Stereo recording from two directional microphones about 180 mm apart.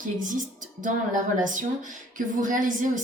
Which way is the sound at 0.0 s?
45° right (ahead or behind).